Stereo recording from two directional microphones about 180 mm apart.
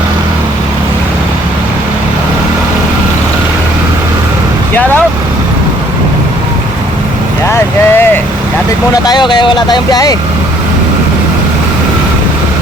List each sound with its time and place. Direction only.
7.5 s vehicle: 10° left (ahead or behind)
9.0 s speech: 25° left (ahead or behind)